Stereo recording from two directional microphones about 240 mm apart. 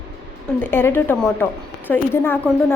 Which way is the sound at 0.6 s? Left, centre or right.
Centre.